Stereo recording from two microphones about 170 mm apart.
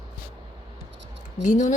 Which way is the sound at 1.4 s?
45° left (ahead or behind).